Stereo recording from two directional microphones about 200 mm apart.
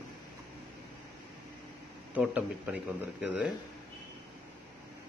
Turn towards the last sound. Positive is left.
turn(degrees=-5)  # may be behind; listen again after turning